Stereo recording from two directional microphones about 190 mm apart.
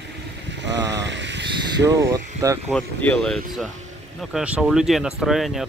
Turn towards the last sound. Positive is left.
turn(degrees=0)  # may be behind; listen again after turning